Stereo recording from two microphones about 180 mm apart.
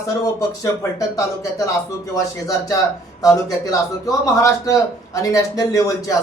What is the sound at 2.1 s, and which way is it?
Speech, 20° left (ahead or behind).